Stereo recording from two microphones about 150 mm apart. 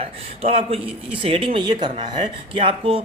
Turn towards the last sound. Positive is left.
turn(degrees=-35)  # may be behind; listen again after turning